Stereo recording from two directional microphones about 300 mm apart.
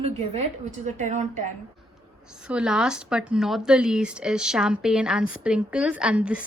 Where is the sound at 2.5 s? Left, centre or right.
Centre.